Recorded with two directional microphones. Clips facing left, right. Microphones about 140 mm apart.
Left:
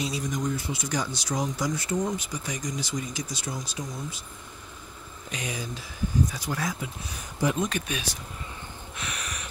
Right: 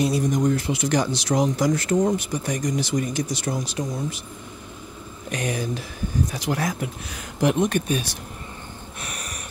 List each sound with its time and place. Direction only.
0.0 s speech: 60° right (ahead or behind)
5.3 s speech: 60° right (ahead or behind)